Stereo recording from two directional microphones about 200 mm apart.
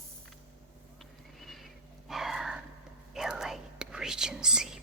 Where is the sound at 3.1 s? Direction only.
Centre (ahead or behind).